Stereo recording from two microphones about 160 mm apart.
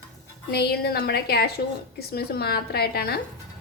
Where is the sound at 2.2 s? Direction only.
80° left.